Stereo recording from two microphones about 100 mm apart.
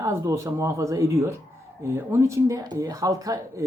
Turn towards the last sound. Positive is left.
turn(degrees=-35)  # may be behind; listen again after turning